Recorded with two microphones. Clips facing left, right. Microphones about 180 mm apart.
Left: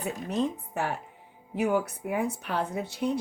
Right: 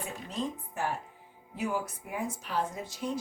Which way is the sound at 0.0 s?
65° left (ahead or behind).